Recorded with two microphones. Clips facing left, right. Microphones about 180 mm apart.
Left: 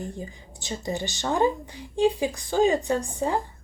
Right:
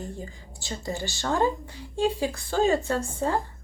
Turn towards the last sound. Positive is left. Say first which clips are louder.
# left 1 dB
turn(degrees=15)  # may be behind; listen again after turning